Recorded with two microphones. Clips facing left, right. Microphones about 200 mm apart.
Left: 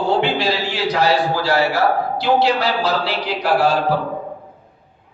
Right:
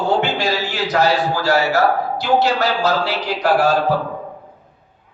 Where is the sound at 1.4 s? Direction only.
45° right (ahead or behind).